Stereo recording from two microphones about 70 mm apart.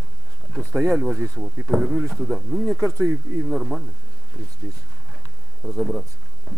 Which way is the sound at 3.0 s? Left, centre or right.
Right.